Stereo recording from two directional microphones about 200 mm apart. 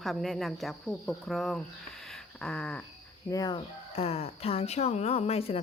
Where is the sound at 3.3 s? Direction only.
20° left (ahead or behind).